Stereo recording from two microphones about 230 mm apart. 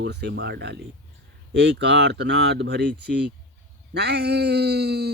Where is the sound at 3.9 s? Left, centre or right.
Right.